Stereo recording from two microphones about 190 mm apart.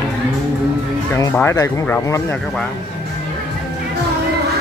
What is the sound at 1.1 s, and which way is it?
Speech, 10° left (ahead or behind).